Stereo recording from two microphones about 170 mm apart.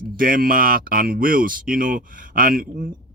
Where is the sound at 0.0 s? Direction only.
55° right (ahead or behind).